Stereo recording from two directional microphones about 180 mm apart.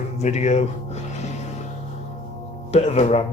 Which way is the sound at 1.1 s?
40° left (ahead or behind).